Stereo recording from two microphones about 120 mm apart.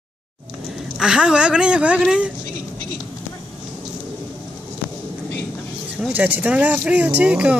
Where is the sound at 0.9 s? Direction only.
5° right (ahead or behind).